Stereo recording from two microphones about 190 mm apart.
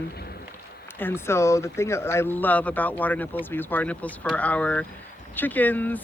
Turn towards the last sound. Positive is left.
turn(degrees=10)  # may be behind; listen again after turning